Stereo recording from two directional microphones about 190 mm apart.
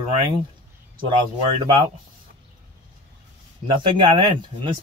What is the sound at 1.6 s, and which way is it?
Speech, 25° right (ahead or behind).